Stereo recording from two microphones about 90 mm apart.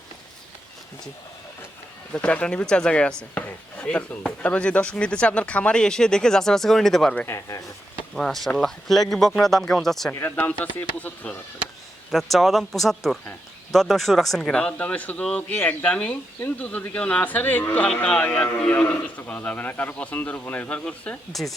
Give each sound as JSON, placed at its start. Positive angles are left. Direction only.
{"t": 2.1, "sound": "speech", "side_deg": 15}
{"t": 7.3, "sound": "speech", "side_deg": 35}
{"t": 8.1, "sound": "speech", "side_deg": 5}
{"t": 10.1, "sound": "speech", "side_deg": 25}
{"t": 12.1, "sound": "speech", "side_deg": 0}